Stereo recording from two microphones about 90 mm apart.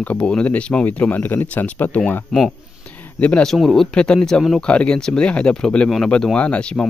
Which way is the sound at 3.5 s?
Centre (ahead or behind).